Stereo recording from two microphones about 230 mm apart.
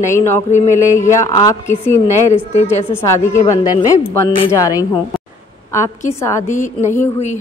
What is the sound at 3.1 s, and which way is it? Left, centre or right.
Speech, centre.